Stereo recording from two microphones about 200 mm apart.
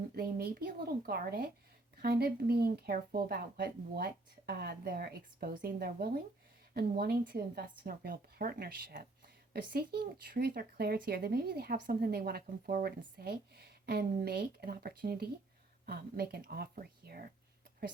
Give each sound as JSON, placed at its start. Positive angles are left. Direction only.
{"t": 0.2, "sound": "a woman's voice", "side_deg": -50}